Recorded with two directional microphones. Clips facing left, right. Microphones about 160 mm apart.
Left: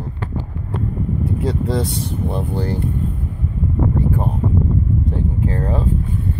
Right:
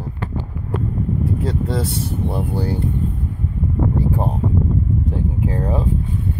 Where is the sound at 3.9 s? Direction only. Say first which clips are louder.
Even; 30° right (ahead or behind).